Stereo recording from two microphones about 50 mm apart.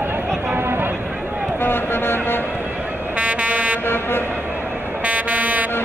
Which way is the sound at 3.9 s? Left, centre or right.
Left.